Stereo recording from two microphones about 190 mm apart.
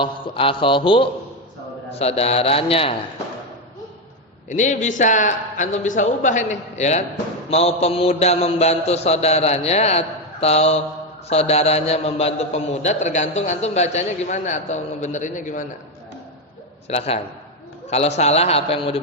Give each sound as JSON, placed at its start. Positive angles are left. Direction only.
{"t": 0.0, "sound": "a sound", "side_deg": 25}
{"t": 1.9, "sound": "a man's voice", "side_deg": 35}
{"t": 4.4, "sound": "a man's voice", "side_deg": 40}
{"t": 16.9, "sound": "a man's voice", "side_deg": 35}